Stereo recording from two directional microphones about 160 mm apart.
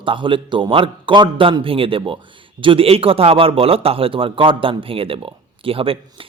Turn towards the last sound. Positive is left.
turn(degrees=-35)  # may be behind; listen again after turning